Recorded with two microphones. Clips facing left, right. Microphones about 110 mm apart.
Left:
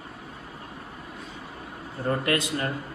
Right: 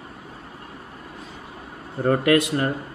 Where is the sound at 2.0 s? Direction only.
60° right (ahead or behind).